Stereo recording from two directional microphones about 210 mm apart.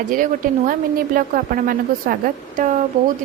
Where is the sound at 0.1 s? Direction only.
40° right (ahead or behind).